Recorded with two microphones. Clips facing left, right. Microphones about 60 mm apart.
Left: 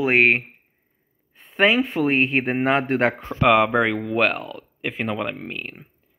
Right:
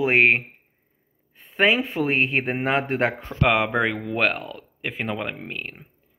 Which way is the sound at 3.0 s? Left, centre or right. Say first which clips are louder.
Left 3 dB; left.